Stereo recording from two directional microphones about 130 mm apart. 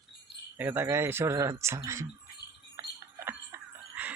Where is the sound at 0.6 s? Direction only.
15° right (ahead or behind).